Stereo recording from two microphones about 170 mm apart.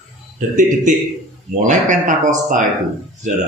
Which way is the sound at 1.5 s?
45° right (ahead or behind).